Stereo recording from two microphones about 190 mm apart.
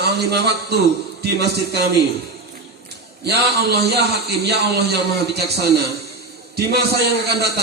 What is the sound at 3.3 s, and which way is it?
A man's voice, 60° right (ahead or behind).